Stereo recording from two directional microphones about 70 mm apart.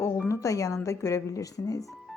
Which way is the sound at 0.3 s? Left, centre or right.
Left.